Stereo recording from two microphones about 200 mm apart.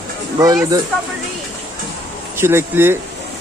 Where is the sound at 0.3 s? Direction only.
15° right (ahead or behind).